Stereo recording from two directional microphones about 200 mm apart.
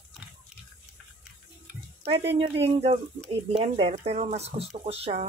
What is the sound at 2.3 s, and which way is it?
Speech, 30° right (ahead or behind).